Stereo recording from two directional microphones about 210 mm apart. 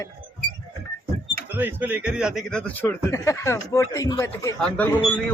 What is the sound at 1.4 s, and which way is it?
Speech, 10° right (ahead or behind).